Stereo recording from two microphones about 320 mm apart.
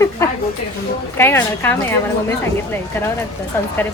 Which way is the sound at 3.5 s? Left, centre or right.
Centre.